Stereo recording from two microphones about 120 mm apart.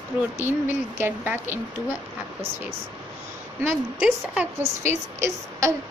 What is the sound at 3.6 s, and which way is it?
Speech, 10° right (ahead or behind).